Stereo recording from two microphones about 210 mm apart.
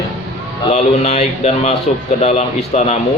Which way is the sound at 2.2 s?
30° left (ahead or behind).